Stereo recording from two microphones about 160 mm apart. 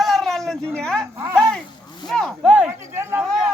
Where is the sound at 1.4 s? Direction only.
5° left (ahead or behind).